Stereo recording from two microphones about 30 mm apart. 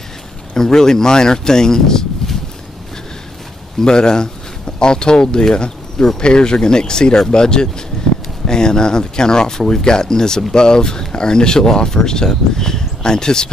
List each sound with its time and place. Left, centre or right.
0.6 s speech: centre
3.8 s speech: left